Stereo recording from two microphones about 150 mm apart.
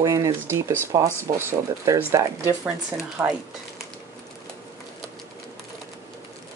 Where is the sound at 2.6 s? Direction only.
5° right (ahead or behind).